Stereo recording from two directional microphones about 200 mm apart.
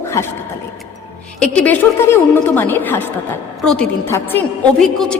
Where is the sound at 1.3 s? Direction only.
5° left (ahead or behind).